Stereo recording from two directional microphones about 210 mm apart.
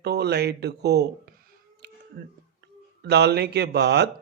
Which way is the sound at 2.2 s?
50° right (ahead or behind).